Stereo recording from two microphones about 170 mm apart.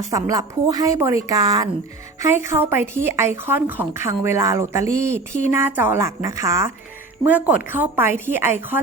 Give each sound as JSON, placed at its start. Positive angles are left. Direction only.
{"t": 0.1, "sound": "a woman's voice", "side_deg": -20}